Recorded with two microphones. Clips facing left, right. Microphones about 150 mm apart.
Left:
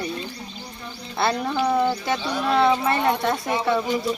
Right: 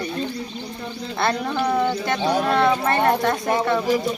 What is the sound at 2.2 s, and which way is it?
Speech, 45° right (ahead or behind).